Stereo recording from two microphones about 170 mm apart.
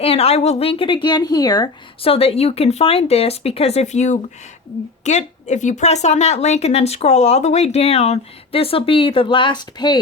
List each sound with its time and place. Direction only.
0.0 s a woman's voice: 35° left (ahead or behind)